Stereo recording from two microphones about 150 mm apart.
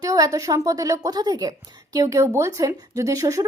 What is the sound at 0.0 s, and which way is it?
A woman's voice, 25° right (ahead or behind).